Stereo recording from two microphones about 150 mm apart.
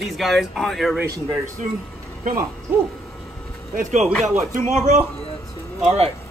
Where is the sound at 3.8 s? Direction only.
55° right (ahead or behind).